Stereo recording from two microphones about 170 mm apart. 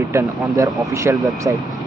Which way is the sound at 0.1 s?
20° right (ahead or behind).